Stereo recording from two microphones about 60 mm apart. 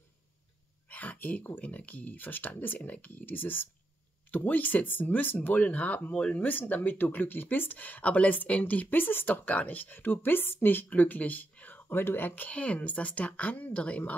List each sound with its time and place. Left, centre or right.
0.8 s a sound: left
1.6 s speech: left
6.3 s speech: left
12.4 s speech: left